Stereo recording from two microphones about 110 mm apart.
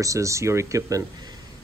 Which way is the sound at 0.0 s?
30° right (ahead or behind).